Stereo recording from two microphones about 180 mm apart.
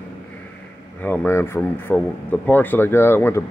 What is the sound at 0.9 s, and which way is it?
Speech, 10° left (ahead or behind).